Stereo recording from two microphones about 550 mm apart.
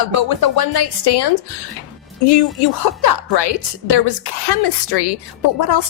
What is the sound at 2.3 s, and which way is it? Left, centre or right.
A woman's voice, left.